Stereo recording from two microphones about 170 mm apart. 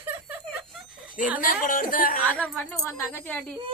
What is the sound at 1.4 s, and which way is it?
Speech, 55° left (ahead or behind).